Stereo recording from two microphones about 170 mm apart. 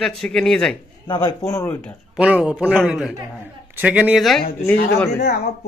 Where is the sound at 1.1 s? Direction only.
25° left (ahead or behind).